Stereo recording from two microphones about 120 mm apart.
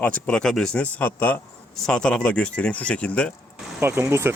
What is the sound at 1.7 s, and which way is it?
Speech, 5° left (ahead or behind).